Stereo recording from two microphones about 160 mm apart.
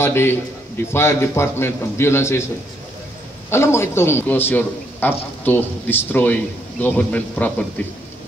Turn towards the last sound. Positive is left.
turn(degrees=10)  # may be behind; listen again after turning